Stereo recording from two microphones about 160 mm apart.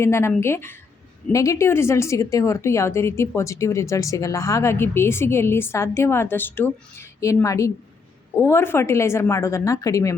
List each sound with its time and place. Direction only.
0.0 s a woman's voice: 15° left (ahead or behind)